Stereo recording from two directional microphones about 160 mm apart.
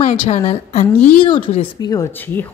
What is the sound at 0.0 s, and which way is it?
A woman's voice, 45° left (ahead or behind).